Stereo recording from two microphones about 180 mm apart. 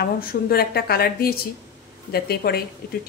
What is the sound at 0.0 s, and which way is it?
A woman's voice, 55° left (ahead or behind).